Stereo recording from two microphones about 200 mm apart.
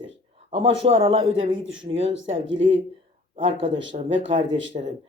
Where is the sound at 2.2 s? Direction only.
25° right (ahead or behind).